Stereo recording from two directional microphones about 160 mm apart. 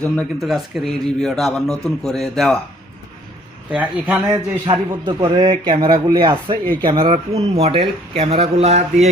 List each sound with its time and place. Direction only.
0.0 s a man's voice: 5° left (ahead or behind)
3.7 s speech: 10° right (ahead or behind)
4.3 s a man's voice: 25° right (ahead or behind)
7.0 s speech: 35° right (ahead or behind)